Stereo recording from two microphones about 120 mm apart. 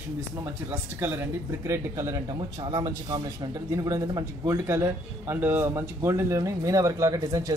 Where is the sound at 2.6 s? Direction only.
35° right (ahead or behind).